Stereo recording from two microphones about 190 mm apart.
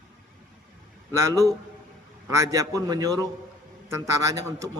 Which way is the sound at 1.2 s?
15° right (ahead or behind).